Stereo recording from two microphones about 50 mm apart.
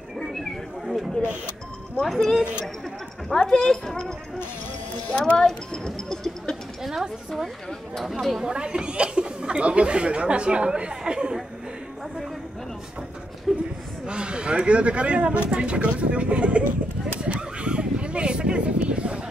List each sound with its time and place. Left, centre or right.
0.2 s a sound: centre
2.0 s speech: centre
5.2 s speech: centre
6.8 s speech: centre
8.5 s speech: centre
13.5 s speech: centre
14.0 s speech: centre
17.2 s a sound: right